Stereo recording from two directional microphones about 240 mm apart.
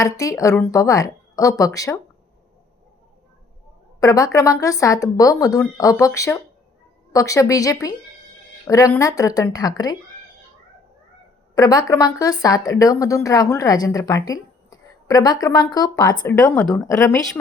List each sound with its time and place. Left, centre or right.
0.0 s speech: centre
4.0 s speech: centre
11.5 s speech: centre